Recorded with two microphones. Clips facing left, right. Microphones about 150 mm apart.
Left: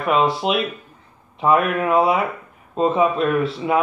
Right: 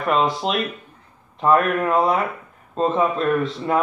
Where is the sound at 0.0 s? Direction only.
5° left (ahead or behind).